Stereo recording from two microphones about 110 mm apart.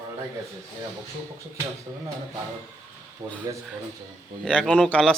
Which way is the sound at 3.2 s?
25° right (ahead or behind).